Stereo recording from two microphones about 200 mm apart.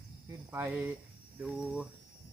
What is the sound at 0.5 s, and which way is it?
Speech, 10° right (ahead or behind).